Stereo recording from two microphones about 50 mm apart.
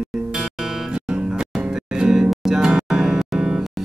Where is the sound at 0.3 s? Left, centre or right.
Centre.